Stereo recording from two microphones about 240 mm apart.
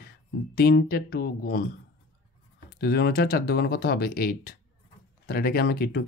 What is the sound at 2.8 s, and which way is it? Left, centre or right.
Speech, left.